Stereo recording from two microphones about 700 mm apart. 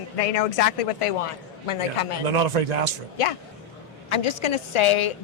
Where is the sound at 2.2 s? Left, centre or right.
Right.